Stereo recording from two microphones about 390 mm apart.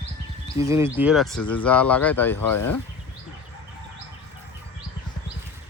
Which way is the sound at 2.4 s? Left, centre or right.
Left.